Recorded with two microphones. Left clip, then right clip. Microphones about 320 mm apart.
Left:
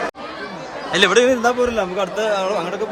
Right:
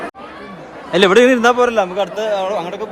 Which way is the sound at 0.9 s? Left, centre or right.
Centre.